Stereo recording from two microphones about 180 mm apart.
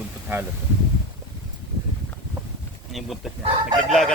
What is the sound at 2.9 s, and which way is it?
Speech, centre (ahead or behind).